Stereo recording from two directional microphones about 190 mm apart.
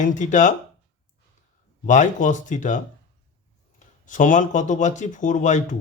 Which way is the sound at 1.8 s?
40° left (ahead or behind).